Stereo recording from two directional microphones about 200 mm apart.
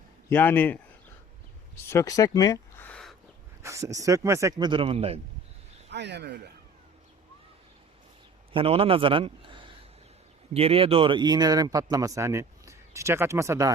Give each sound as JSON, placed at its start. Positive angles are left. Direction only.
{"t": 0.3, "sound": "a man's voice", "side_deg": 10}
{"t": 1.9, "sound": "a sound", "side_deg": 15}
{"t": 3.6, "sound": "speech", "side_deg": -15}
{"t": 5.9, "sound": "speech", "side_deg": -60}
{"t": 8.5, "sound": "a man's voice", "side_deg": -30}